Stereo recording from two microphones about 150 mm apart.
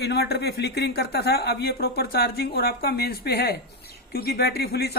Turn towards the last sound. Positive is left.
turn(degrees=90)